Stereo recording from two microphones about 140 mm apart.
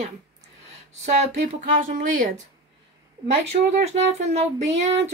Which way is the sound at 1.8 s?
75° right (ahead or behind).